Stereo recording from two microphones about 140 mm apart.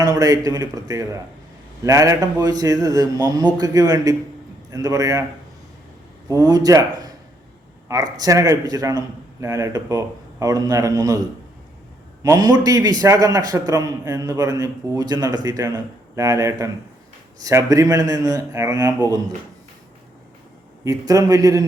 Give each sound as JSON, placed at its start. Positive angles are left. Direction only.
{"t": 0.0, "sound": "a man's voice", "side_deg": -25}
{"t": 6.2, "sound": "a man's voice", "side_deg": -25}
{"t": 12.2, "sound": "a man's voice", "side_deg": -25}
{"t": 20.8, "sound": "a man's voice", "side_deg": -25}